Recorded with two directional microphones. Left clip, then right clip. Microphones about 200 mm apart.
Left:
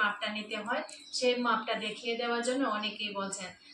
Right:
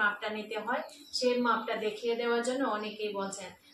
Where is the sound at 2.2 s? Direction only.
20° right (ahead or behind).